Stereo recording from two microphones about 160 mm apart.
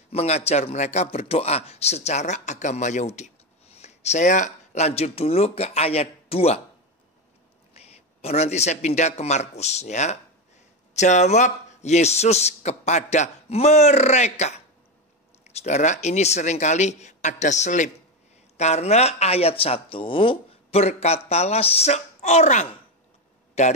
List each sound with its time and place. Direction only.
0.1 s a man's voice: 40° left (ahead or behind)
7.7 s a man's voice: 40° left (ahead or behind)